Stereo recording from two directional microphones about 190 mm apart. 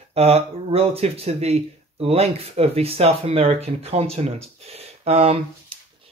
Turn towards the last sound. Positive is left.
turn(degrees=-30)  # may be behind; listen again after turning